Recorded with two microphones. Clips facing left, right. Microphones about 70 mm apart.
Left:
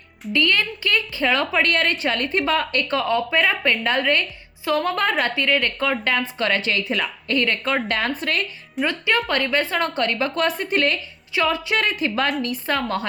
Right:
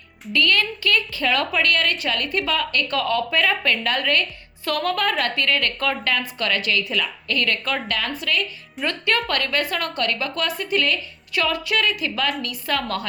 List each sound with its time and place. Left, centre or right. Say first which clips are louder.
0.3 s a woman's voice: even; left
2.9 s a woman's voice: left 2 dB; left
8.9 s a woman's voice: even; centre; by 10.9 s left
11.3 s a woman's voice: left 1 dB; left